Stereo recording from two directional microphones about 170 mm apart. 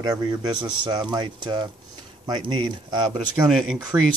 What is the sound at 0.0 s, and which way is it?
Speech, 25° right (ahead or behind).